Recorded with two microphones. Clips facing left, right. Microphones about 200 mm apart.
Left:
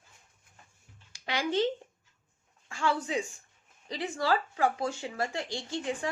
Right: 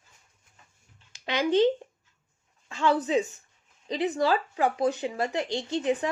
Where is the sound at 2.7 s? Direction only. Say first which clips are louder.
Right 6 dB; 20° right (ahead or behind).